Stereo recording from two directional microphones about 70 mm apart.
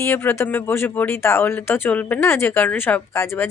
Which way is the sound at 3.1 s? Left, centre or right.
Left.